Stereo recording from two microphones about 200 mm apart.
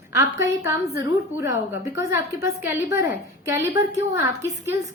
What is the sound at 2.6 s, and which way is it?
A woman's voice, 10° right (ahead or behind).